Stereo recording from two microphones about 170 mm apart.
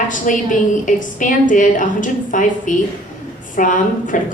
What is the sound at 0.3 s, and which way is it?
A woman's voice, 50° left (ahead or behind).